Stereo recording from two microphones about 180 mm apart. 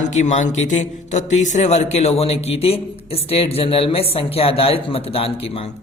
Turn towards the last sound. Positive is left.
turn(degrees=30)  # may be behind; listen again after turning